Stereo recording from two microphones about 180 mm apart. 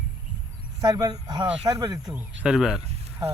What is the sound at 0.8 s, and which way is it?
Speech, 20° right (ahead or behind).